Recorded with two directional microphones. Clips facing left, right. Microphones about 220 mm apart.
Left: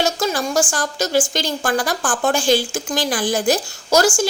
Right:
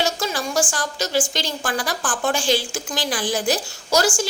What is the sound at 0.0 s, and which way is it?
A woman's voice, 45° left (ahead or behind).